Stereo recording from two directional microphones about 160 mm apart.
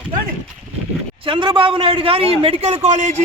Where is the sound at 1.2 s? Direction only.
30° right (ahead or behind).